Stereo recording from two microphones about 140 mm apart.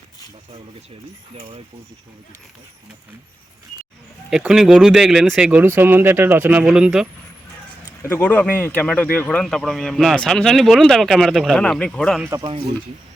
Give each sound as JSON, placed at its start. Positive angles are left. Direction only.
{"t": 1.4, "sound": "speech", "side_deg": -50}
{"t": 4.3, "sound": "a man's voice", "side_deg": -5}
{"t": 5.5, "sound": "speech", "side_deg": -15}
{"t": 8.2, "sound": "a man's voice", "side_deg": 10}
{"t": 12.4, "sound": "speech", "side_deg": -40}